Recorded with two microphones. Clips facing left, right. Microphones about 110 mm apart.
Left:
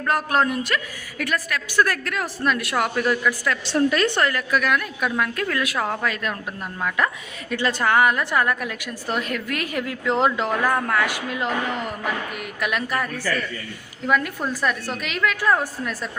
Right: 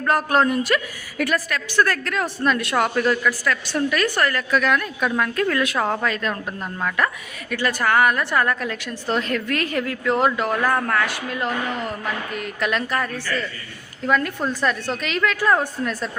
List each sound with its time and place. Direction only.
0.0 s a woman's voice: centre (ahead or behind)
1.5 s a woman's voice: 10° left (ahead or behind)
3.1 s a woman's voice: 15° left (ahead or behind)
3.7 s a woman's voice: 30° left (ahead or behind); by 6.3 s 5° left (ahead or behind)
7.5 s a woman's voice: 25° left (ahead or behind); by 16.0 s centre (ahead or behind)